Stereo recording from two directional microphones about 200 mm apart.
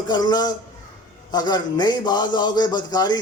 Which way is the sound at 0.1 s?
20° left (ahead or behind).